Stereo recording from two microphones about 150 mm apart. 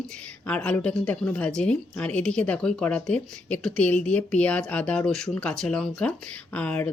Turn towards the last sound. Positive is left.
turn(degrees=10)  # may be behind; listen again after turning